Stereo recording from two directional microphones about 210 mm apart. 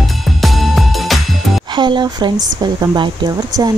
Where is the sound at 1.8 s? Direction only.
20° right (ahead or behind).